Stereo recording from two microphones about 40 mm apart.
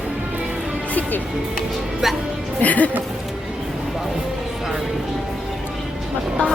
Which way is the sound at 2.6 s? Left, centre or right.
Left.